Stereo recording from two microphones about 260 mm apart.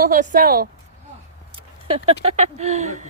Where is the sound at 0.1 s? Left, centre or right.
Right.